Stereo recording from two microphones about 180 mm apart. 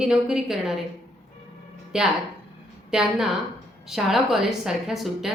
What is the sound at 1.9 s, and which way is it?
A woman's voice, 5° right (ahead or behind).